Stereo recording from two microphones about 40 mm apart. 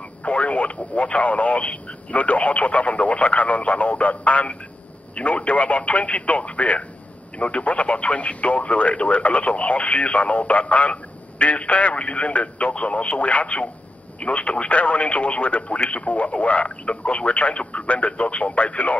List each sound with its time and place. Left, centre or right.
0.2 s speech: left